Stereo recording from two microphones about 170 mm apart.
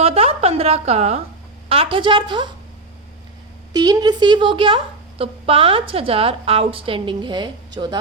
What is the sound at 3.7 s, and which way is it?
A woman's voice, 25° right (ahead or behind).